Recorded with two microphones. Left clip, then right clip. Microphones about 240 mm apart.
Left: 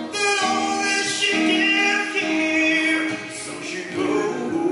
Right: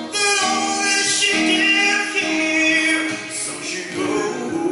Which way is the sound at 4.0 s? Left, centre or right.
Centre.